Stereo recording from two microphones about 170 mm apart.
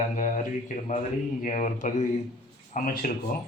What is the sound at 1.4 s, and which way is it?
Speech, 45° left (ahead or behind).